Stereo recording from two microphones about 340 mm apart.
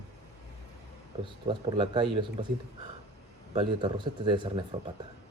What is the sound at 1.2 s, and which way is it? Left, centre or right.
A man's voice, centre.